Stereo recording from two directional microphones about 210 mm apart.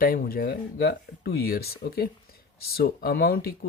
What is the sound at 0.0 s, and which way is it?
Speech, 45° left (ahead or behind).